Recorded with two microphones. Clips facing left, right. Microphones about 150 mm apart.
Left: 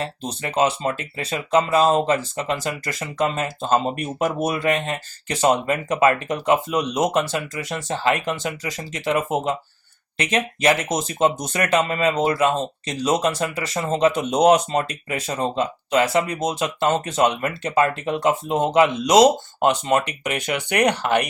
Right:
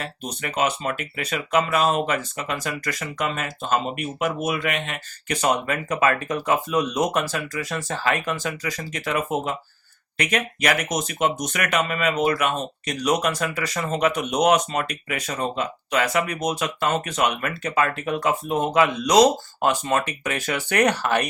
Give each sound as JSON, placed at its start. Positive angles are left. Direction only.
{"t": 0.0, "sound": "speech", "side_deg": 30}